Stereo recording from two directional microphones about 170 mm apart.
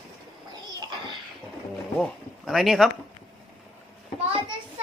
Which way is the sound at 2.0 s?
Centre (ahead or behind).